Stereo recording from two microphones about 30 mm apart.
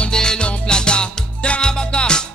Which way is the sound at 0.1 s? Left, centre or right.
Left.